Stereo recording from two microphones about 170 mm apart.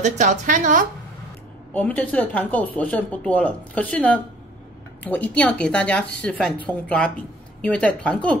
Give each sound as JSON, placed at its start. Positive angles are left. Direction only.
{"t": 0.0, "sound": "a woman's voice", "side_deg": -45}
{"t": 1.7, "sound": "speech", "side_deg": 10}